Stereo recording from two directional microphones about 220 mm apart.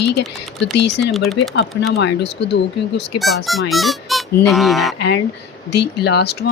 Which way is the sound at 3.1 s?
Centre (ahead or behind).